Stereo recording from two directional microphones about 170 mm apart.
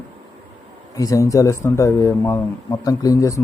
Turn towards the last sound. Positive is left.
turn(degrees=20)  # may be behind; listen again after turning